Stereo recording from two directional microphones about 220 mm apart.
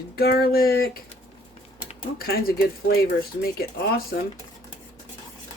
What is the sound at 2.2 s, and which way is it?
Speech, 45° left (ahead or behind).